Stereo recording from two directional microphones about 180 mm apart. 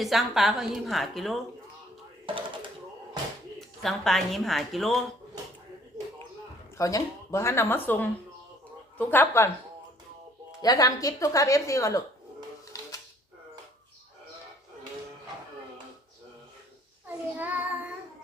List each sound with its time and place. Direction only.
0.0 s a woman's voice: centre (ahead or behind)
2.2 s a sound: 30° right (ahead or behind)
3.8 s a woman's voice: centre (ahead or behind)
6.7 s speech: 20° left (ahead or behind)
10.6 s speech: 20° left (ahead or behind)
17.3 s child singing: 10° right (ahead or behind)